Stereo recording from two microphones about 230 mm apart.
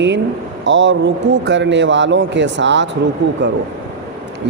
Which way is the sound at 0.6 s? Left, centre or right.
Right.